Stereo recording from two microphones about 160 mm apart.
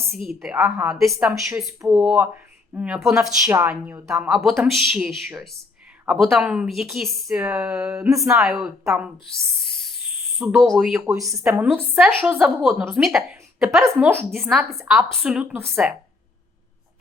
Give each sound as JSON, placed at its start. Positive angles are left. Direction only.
{"t": 0.3, "sound": "speech", "side_deg": -5}
{"t": 4.0, "sound": "speech", "side_deg": -5}
{"t": 7.9, "sound": "speech", "side_deg": -20}
{"t": 8.3, "sound": "speech", "side_deg": -5}
{"t": 9.8, "sound": "a sound", "side_deg": 0}
{"t": 10.6, "sound": "speech", "side_deg": 0}
{"t": 11.0, "sound": "speech", "side_deg": -15}
{"t": 11.6, "sound": "speech", "side_deg": -10}
{"t": 14.0, "sound": "speech", "side_deg": -15}